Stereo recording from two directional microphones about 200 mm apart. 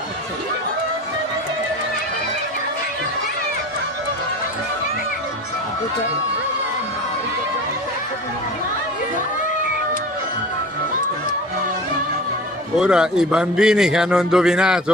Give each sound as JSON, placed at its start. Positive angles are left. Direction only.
{"t": 12.7, "sound": "a man's voice", "side_deg": -5}